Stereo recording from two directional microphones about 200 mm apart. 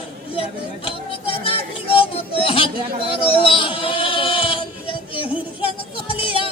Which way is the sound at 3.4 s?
25° left (ahead or behind).